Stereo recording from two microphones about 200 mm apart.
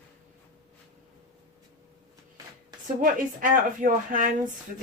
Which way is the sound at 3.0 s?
40° right (ahead or behind).